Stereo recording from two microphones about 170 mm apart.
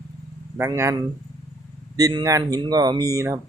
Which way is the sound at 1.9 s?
20° right (ahead or behind).